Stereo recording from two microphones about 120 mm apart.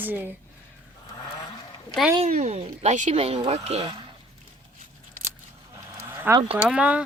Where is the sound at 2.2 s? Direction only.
65° right (ahead or behind); by 4.0 s 50° right (ahead or behind).